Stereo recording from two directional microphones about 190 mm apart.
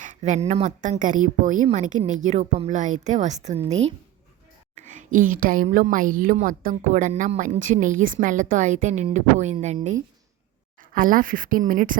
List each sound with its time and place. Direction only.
0.0 s a woman's voice: 40° right (ahead or behind)
10.9 s speech: 45° right (ahead or behind)